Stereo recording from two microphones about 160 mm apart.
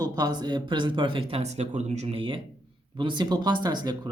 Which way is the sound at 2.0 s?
30° right (ahead or behind).